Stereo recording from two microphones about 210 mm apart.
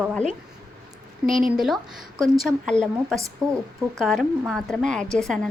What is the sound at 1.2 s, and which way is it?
Speech, 40° right (ahead or behind).